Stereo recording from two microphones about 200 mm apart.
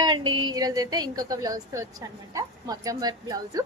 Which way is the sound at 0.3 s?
20° right (ahead or behind).